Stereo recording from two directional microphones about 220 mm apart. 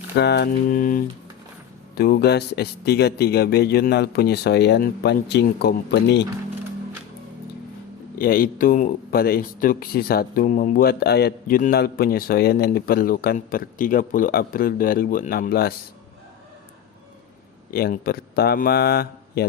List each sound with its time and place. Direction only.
0.2 s a man's voice: 50° left (ahead or behind)
8.2 s speech: 40° left (ahead or behind)
17.7 s a man's voice: 40° left (ahead or behind)